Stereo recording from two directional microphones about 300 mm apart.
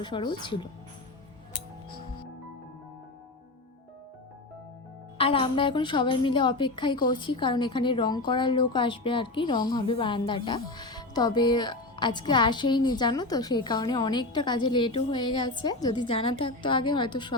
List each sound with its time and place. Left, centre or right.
0.0 s a woman's voice: centre
5.1 s a woman's voice: centre